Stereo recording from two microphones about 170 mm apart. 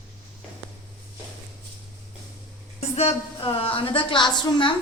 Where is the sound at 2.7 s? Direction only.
35° left (ahead or behind).